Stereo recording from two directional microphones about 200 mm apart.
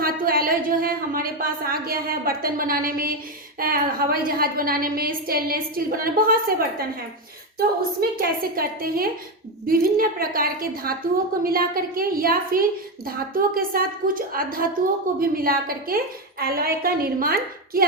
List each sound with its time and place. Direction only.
0.0 s a woman's voice: 45° right (ahead or behind)